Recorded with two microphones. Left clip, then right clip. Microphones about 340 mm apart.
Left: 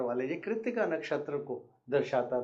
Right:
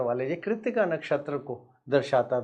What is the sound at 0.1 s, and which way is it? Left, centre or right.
Speech, right.